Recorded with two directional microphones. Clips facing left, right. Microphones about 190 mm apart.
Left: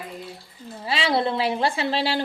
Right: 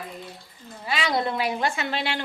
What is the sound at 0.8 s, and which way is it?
A woman's voice, 30° left (ahead or behind).